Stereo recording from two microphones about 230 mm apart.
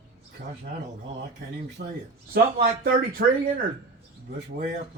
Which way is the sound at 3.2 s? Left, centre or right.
Right.